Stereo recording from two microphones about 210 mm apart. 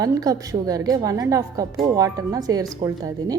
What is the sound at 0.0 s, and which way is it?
A woman's voice, 15° right (ahead or behind).